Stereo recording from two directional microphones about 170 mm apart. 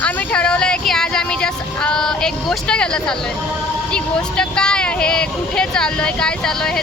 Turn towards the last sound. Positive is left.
turn(degrees=5)  # may be behind; listen again after turning